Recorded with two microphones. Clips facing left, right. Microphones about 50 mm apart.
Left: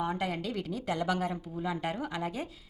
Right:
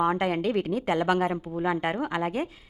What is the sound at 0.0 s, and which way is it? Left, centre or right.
Speech, right.